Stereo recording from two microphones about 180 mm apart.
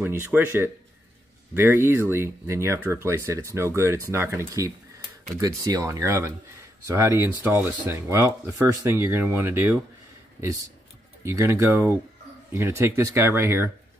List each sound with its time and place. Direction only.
0.0 s speech: 10° right (ahead or behind)